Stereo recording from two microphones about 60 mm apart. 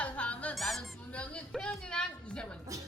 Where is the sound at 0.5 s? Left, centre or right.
Centre.